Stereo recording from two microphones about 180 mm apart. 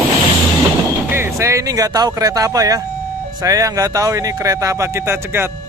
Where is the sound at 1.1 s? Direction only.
15° right (ahead or behind).